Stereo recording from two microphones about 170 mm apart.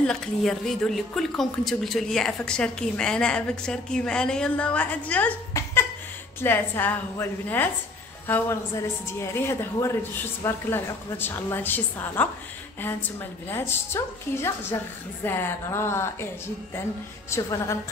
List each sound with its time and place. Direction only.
0.0 s a woman's voice: 5° left (ahead or behind)
9.2 s a woman's voice: 15° left (ahead or behind)
13.5 s a woman's voice: 15° left (ahead or behind)
17.3 s a woman's voice: 15° left (ahead or behind)